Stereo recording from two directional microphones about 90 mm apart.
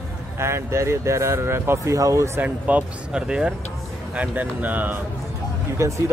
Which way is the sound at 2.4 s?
15° right (ahead or behind).